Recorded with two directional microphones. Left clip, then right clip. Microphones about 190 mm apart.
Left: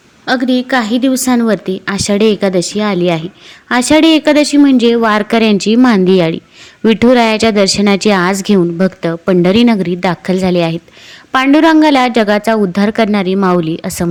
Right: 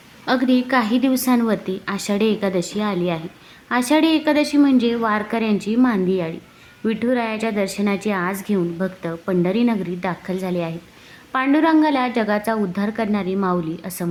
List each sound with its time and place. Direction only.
0.3 s a woman's voice: 15° left (ahead or behind)